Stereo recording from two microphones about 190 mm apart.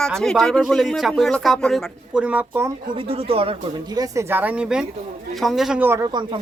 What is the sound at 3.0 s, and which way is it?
Speech, 30° right (ahead or behind).